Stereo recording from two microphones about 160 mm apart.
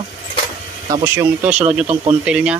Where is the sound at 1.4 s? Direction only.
5° right (ahead or behind).